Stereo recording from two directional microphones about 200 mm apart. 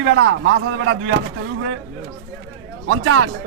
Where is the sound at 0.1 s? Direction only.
80° right.